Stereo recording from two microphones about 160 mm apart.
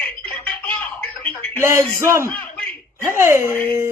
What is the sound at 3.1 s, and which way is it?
Speech, 15° right (ahead or behind).